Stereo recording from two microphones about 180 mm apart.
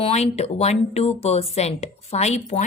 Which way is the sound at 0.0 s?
35° left (ahead or behind).